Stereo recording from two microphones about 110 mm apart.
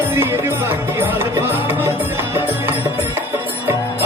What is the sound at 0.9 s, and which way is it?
Music, 20° right (ahead or behind).